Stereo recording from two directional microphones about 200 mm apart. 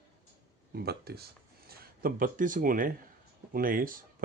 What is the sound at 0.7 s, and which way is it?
Speech, 50° right (ahead or behind).